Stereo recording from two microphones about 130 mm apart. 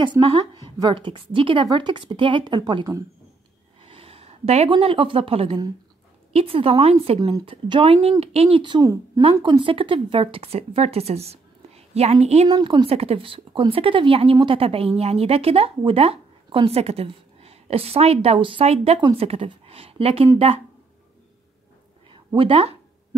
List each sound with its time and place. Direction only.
0.0 s a woman's voice: 40° right (ahead or behind)
3.8 s a sound: 45° right (ahead or behind)
4.6 s speech: 45° right (ahead or behind)
7.2 s a woman's voice: 35° right (ahead or behind)
8.2 s a woman's voice: 50° right (ahead or behind); by 9.2 s 25° right (ahead or behind)
9.2 s speech: 40° right (ahead or behind); by 12.4 s 55° right (ahead or behind)
12.4 s speech: 35° right (ahead or behind); by 20.6 s 50° right (ahead or behind)
22.1 s speech: 40° right (ahead or behind)